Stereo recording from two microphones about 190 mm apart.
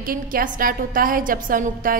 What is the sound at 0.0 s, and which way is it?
A woman's voice, 45° right (ahead or behind).